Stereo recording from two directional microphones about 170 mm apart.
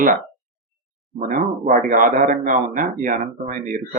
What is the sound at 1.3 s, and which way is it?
Speech, 50° right (ahead or behind).